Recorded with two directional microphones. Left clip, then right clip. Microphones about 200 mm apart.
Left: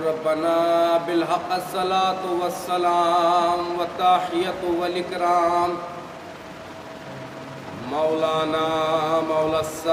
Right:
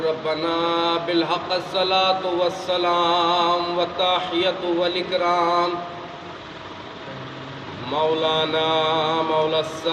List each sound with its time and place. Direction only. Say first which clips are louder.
0.4 s mantra: left 3 dB; 15° left (ahead or behind)
8.2 s mantra: right 1 dB; 15° left (ahead or behind)